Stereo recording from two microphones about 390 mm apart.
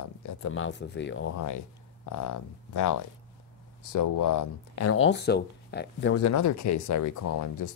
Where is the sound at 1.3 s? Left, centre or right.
Left.